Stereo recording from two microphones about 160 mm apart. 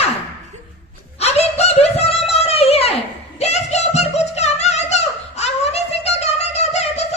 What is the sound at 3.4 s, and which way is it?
Music, 45° left (ahead or behind).